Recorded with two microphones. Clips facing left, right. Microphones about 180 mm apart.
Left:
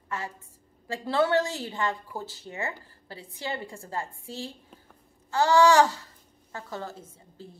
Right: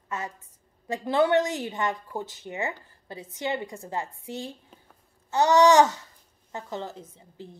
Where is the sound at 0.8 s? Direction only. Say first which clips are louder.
Right 2 dB; 20° right (ahead or behind).